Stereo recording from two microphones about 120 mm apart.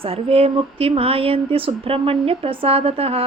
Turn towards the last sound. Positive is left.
turn(degrees=-55)  # may be behind; listen again after turning